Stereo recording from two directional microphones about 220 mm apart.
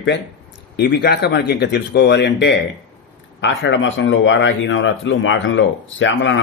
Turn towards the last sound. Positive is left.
turn(degrees=60)  # may be behind; listen again after turning